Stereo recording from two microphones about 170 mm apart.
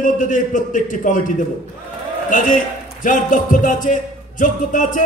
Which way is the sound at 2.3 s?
50° left (ahead or behind).